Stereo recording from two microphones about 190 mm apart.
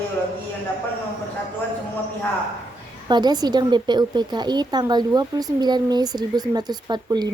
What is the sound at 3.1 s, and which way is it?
A woman's voice, 20° right (ahead or behind).